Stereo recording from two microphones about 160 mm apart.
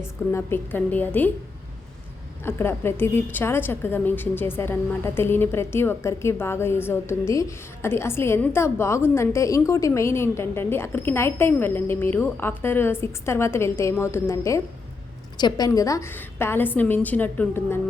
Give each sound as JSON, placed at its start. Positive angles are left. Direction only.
{"t": 0.3, "sound": "a woman's voice", "side_deg": 15}
{"t": 2.4, "sound": "a woman's voice", "side_deg": 15}